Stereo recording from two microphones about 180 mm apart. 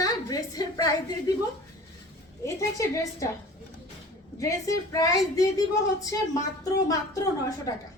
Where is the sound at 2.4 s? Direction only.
15° left (ahead or behind).